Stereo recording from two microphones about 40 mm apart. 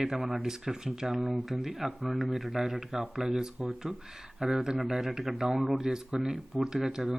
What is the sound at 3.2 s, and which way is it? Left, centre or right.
Speech, centre.